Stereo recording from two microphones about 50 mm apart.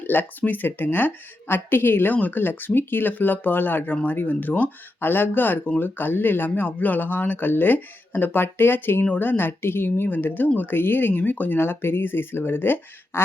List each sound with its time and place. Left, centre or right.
0.0 s speech: left
4.9 s speech: left